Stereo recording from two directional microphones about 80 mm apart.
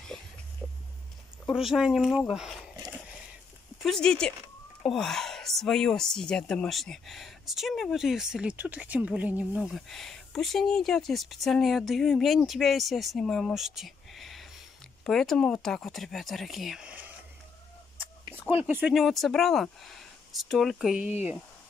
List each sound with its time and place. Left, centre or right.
0.6 s a sound: centre
1.5 s speech: centre
3.8 s speech: centre
9.6 s speech: centre
18.5 s speech: right
18.9 s speech: centre